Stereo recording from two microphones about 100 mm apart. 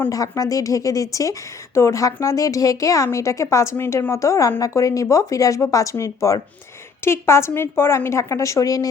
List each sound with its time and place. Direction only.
0.1 s a woman's voice: 35° left (ahead or behind)